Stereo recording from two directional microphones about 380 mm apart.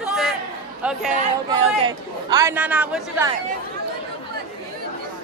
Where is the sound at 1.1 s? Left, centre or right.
Centre.